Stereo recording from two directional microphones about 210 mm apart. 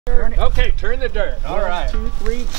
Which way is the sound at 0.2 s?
20° right (ahead or behind).